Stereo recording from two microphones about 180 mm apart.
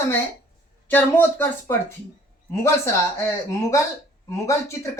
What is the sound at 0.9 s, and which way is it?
Speech, 10° left (ahead or behind).